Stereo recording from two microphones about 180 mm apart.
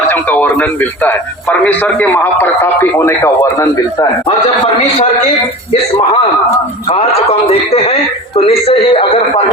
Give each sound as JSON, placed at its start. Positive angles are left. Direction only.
{"t": 0.1, "sound": "a man's voice", "side_deg": 10}
{"t": 4.8, "sound": "a man's voice", "side_deg": 35}
{"t": 6.9, "sound": "a man's voice", "side_deg": 35}